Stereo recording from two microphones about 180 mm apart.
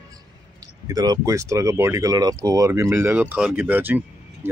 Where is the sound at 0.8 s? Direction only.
20° right (ahead or behind).